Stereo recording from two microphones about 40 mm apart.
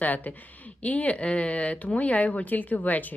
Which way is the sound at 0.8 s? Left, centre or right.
Left.